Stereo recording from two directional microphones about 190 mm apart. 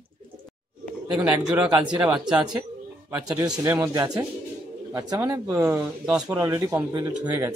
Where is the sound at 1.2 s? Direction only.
10° right (ahead or behind).